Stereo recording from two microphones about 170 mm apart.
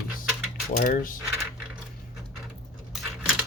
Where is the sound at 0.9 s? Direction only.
55° left (ahead or behind).